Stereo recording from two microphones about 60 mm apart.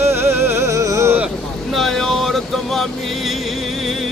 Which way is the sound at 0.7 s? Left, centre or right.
Right.